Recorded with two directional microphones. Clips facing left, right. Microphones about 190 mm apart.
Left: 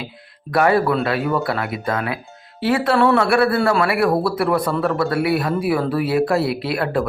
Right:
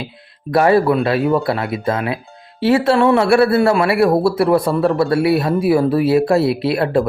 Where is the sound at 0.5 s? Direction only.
25° right (ahead or behind).